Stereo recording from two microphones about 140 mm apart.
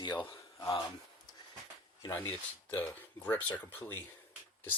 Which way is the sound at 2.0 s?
15° left (ahead or behind).